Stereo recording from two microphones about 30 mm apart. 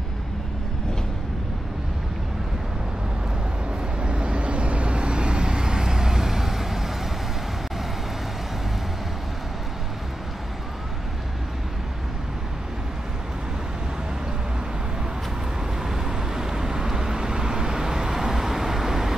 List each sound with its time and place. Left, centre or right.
4.0 s vehicle: right; by 6.8 s centre
15.8 s vehicle: centre